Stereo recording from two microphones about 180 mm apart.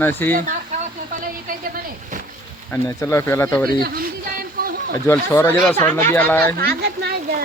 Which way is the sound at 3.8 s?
55° right (ahead or behind).